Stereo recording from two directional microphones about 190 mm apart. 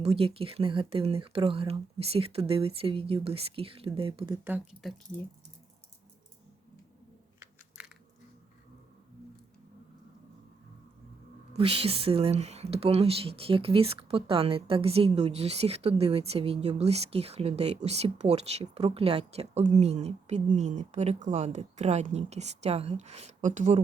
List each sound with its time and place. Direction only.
0.0 s speech: 30° right (ahead or behind)
4.4 s speech: 5° right (ahead or behind)
7.8 s biting: 5° right (ahead or behind)
11.5 s speech: 30° right (ahead or behind)